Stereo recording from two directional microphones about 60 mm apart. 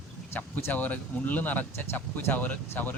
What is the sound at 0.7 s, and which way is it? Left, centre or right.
Speech, left.